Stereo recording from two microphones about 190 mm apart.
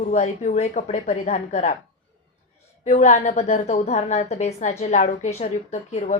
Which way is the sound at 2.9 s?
35° left (ahead or behind).